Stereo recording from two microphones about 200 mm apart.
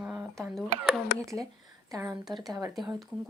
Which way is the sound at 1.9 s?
15° right (ahead or behind).